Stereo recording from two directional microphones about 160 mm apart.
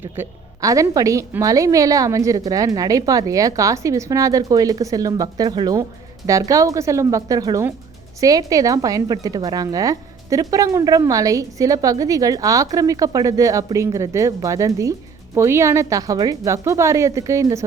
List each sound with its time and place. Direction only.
0.0 s a woman's voice: 15° right (ahead or behind)